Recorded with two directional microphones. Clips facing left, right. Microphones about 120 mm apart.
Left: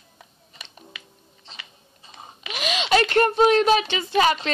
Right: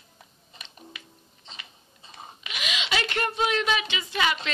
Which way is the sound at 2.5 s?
40° left (ahead or behind).